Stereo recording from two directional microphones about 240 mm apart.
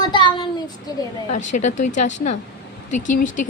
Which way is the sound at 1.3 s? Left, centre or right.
Left.